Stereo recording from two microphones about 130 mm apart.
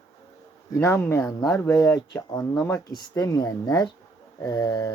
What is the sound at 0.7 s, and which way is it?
Speech, 20° left (ahead or behind).